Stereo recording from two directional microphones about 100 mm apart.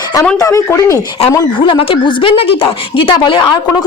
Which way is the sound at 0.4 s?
35° left (ahead or behind).